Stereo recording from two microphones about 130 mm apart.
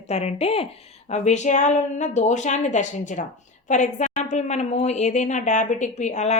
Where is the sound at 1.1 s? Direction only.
60° left (ahead or behind).